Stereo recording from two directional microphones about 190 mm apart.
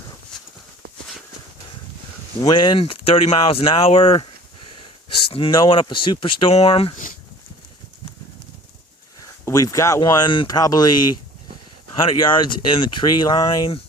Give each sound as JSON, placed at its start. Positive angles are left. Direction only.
{"t": 2.4, "sound": "speech", "side_deg": 25}
{"t": 9.2, "sound": "speech", "side_deg": 15}
{"t": 12.0, "sound": "speech", "side_deg": 25}